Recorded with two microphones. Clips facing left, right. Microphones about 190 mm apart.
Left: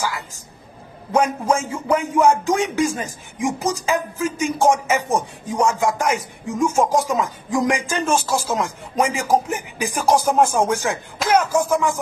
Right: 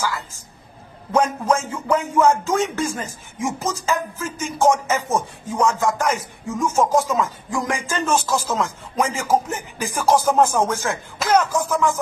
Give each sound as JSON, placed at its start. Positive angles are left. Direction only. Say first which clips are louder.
{"t": 1.1, "sound": "speech", "louder": "even", "side_deg": 10}